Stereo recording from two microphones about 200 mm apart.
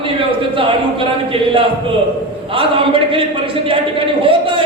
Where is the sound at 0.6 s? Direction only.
25° right (ahead or behind).